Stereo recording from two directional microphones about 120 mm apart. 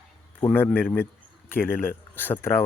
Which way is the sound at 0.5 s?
15° left (ahead or behind).